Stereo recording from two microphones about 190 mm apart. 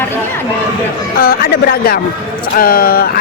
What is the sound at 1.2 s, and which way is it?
Speech, 50° left (ahead or behind).